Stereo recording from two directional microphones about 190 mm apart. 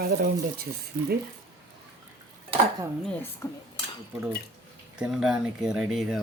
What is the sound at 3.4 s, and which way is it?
Cutlery, 15° left (ahead or behind).